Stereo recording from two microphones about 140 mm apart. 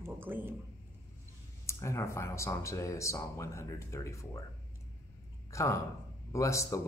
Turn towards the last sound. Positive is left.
turn(degrees=20)  # may be behind; listen again after turning